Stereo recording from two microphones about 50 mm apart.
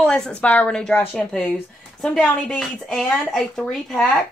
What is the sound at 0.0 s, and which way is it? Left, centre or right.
Speech, centre.